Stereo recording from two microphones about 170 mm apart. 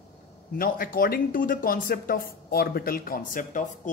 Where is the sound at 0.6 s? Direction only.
60° left (ahead or behind).